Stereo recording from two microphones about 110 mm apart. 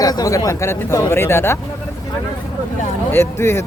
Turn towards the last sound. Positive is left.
turn(degrees=20)  # may be behind; listen again after turning